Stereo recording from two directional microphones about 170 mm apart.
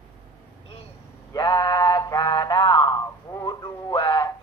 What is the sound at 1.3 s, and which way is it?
Mantra, 25° left (ahead or behind).